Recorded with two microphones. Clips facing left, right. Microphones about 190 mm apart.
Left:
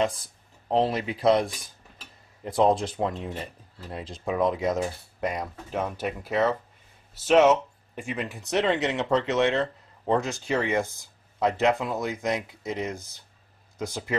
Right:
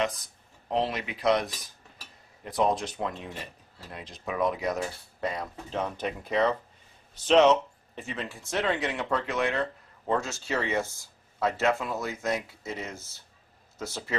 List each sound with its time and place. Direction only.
0.0 s speech: 30° left (ahead or behind); by 14.1 s 15° left (ahead or behind)